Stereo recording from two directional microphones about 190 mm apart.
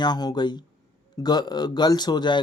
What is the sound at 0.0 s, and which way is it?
Speech, 20° left (ahead or behind).